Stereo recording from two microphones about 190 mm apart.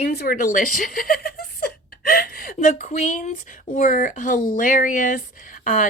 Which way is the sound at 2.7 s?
35° left (ahead or behind).